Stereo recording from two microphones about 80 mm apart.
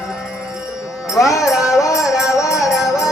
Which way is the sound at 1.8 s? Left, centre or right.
Left.